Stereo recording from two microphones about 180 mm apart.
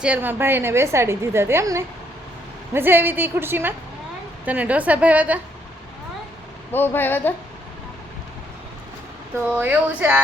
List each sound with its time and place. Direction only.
0.0 s a woman's voice: 10° right (ahead or behind)
6.7 s speech: 10° left (ahead or behind)
9.5 s a woman's voice: 10° right (ahead or behind)